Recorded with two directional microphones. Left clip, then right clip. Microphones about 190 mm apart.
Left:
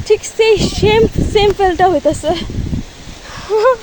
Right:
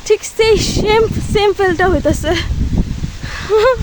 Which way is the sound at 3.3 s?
25° right (ahead or behind).